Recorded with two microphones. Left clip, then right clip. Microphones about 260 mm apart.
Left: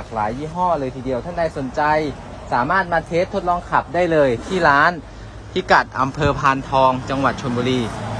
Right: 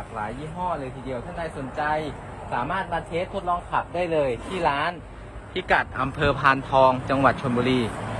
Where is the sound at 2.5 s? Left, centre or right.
Left; by 7.9 s centre.